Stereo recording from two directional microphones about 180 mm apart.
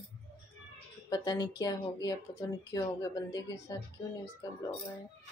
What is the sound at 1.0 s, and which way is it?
Speech, 20° left (ahead or behind).